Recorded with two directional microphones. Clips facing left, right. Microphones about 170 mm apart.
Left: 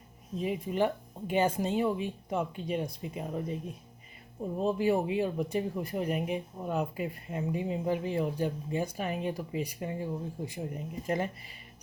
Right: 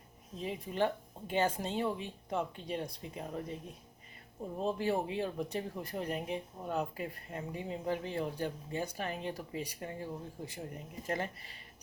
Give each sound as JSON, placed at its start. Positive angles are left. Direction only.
{"t": 0.3, "sound": "speech", "side_deg": 15}
{"t": 4.6, "sound": "speech", "side_deg": 10}